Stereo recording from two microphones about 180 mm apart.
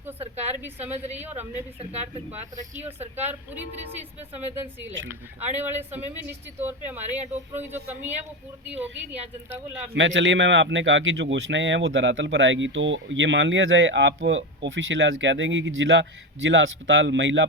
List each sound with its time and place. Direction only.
0.2 s a sound: 35° right (ahead or behind)
0.9 s speech: 35° right (ahead or behind)
1.1 s speech: 10° right (ahead or behind)
1.8 s speech: 35° right (ahead or behind)
3.2 s speech: 10° right (ahead or behind)
9.9 s a man's voice: 90° right